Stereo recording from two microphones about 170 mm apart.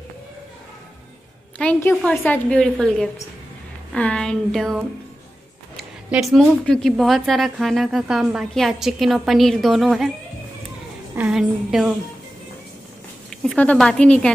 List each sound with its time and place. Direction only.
1.6 s a woman's voice: 10° left (ahead or behind)
11.1 s speech: 5° right (ahead or behind)
13.3 s speech: centre (ahead or behind)